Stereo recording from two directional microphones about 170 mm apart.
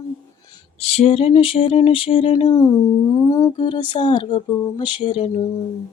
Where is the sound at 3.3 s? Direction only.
20° left (ahead or behind).